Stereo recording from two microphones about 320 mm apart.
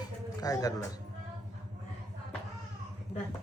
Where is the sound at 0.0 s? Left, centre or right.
Centre.